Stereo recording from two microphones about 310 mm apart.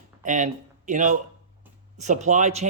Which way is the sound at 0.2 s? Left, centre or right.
Right.